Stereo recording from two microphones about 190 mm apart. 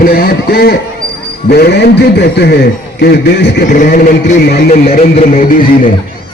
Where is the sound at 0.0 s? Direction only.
50° left (ahead or behind).